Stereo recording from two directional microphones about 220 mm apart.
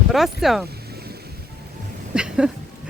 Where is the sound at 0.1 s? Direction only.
Centre (ahead or behind).